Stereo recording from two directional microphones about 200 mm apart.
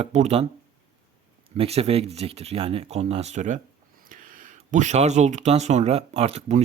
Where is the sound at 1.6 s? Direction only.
30° right (ahead or behind).